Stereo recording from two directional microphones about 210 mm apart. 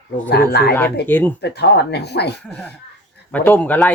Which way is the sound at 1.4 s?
55° left (ahead or behind).